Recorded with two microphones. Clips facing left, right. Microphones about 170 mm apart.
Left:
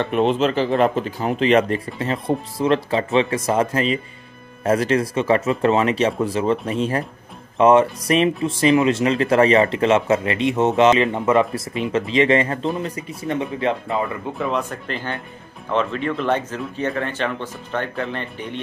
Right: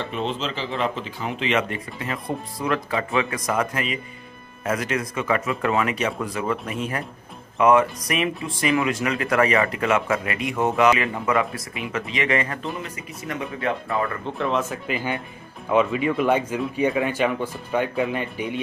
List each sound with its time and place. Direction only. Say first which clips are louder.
0.0 s speech: left 9 dB; 60° left (ahead or behind); by 13.9 s 25° left (ahead or behind)
14.4 s speech: even; centre (ahead or behind)